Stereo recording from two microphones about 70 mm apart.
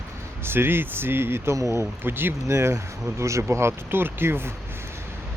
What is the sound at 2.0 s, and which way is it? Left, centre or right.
Speech, right.